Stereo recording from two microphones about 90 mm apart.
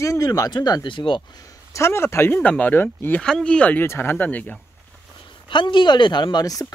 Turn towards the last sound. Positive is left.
turn(degrees=40)  # may be behind; listen again after turning